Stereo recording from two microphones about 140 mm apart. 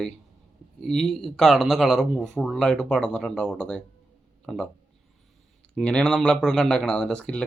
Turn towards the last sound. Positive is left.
turn(degrees=5)  # may be behind; listen again after turning